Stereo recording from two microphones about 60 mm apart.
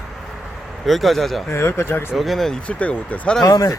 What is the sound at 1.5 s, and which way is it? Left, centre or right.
Speech, left.